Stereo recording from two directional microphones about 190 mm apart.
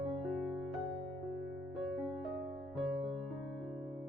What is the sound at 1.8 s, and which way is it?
Music, centre (ahead or behind).